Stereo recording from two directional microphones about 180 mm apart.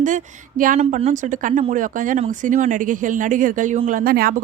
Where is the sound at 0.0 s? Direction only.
45° right (ahead or behind).